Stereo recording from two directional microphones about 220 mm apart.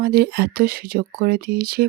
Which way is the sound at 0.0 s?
45° right (ahead or behind).